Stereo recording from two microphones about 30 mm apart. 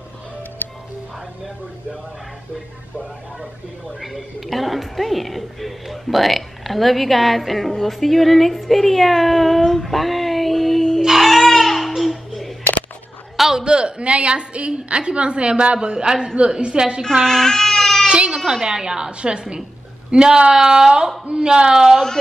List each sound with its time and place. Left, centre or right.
0.6 s music: left
4.0 s a woman's voice: centre
9.6 s child singing: centre
11.1 s baby cry: centre
11.9 s babbling: centre
13.4 s a sound: centre
13.7 s speech: right
17.1 s baby cry: centre
18.0 s speech: right
18.5 s a woman's voice: centre